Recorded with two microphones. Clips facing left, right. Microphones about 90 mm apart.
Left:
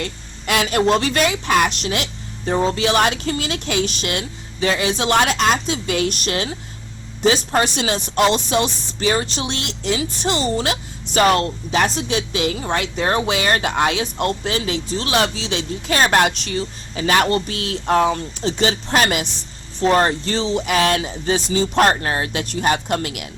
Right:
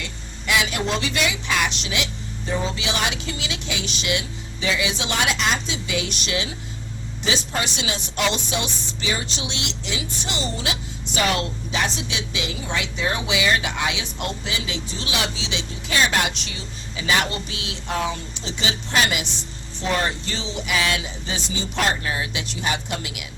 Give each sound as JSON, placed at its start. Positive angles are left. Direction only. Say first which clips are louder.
{"t": 0.0, "sound": "speech", "louder": "left 5 dB", "side_deg": 50}